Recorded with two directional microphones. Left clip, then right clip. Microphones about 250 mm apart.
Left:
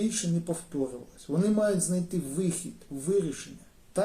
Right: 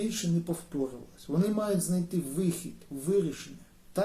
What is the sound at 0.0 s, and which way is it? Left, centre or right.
Speech, centre.